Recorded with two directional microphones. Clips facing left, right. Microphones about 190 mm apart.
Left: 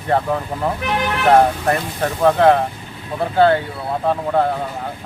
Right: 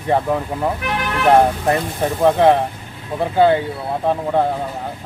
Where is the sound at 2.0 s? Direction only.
15° right (ahead or behind).